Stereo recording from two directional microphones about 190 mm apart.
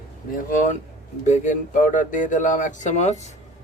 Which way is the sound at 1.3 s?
40° left (ahead or behind).